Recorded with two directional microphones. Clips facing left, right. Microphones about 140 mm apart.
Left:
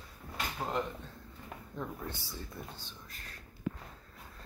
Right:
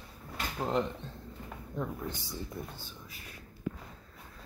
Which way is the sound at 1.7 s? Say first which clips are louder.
Right 4 dB; 15° right (ahead or behind).